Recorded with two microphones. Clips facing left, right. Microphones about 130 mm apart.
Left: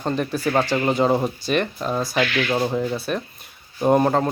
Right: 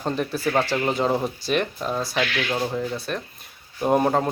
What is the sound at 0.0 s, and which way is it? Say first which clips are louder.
Speech: left 2 dB; centre (ahead or behind).